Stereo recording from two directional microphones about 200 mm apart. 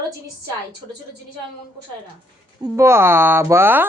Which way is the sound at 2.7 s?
15° right (ahead or behind).